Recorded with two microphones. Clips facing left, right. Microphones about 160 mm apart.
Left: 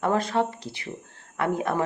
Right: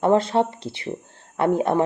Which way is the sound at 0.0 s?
25° right (ahead or behind).